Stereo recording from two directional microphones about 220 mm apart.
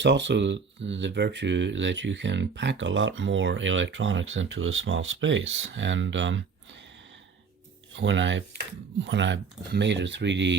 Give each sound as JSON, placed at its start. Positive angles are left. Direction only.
{"t": 0.0, "sound": "speech", "side_deg": -55}
{"t": 7.9, "sound": "speech", "side_deg": -55}